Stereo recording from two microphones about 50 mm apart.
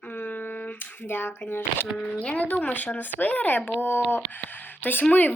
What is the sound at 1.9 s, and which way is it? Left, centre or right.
Speech, left.